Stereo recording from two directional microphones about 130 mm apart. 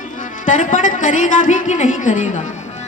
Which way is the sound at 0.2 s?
80° left.